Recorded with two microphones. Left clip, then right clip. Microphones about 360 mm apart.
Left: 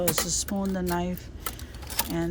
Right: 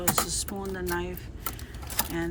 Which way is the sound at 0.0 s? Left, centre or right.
Centre.